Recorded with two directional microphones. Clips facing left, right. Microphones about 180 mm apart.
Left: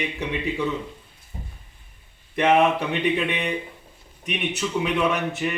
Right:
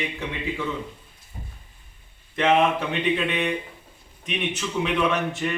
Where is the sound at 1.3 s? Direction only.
20° left (ahead or behind).